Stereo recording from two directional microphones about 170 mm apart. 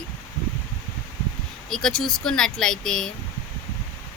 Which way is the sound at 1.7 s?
5° left (ahead or behind).